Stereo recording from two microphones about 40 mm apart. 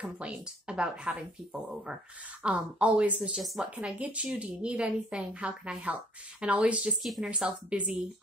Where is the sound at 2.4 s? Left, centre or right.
Right.